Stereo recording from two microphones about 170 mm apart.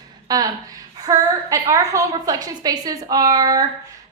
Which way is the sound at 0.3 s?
20° right (ahead or behind).